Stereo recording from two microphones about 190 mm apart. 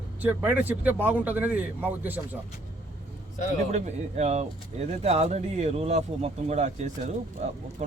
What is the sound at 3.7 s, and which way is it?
A man's voice, 35° right (ahead or behind).